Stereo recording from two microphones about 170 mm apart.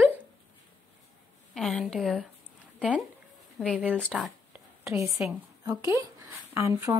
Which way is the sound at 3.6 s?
5° left (ahead or behind).